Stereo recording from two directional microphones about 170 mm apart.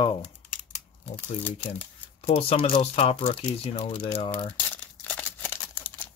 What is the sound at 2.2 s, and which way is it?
Speech, 35° left (ahead or behind).